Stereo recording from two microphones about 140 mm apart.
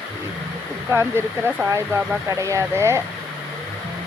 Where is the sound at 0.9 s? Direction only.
15° right (ahead or behind).